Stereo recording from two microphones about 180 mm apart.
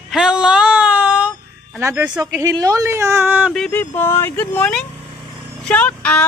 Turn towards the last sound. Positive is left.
turn(degrees=5)  # may be behind; listen again after turning